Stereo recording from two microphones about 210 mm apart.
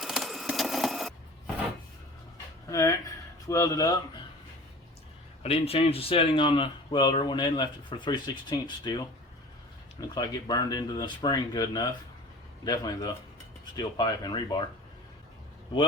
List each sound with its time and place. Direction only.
0.0 s sewing machine: centre (ahead or behind)
2.6 s a sound: 15° left (ahead or behind)
3.4 s speech: 15° left (ahead or behind)
5.4 s speech: 30° left (ahead or behind)
10.2 s speech: 20° left (ahead or behind)